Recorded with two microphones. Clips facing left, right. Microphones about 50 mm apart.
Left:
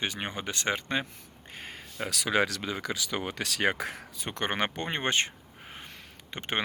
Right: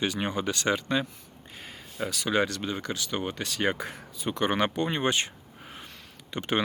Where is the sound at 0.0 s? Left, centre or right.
Left.